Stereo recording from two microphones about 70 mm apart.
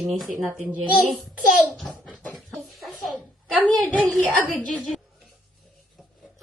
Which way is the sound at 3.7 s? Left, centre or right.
Centre.